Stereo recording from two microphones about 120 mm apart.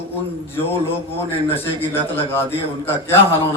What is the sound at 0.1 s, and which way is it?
A man's voice, 15° left (ahead or behind).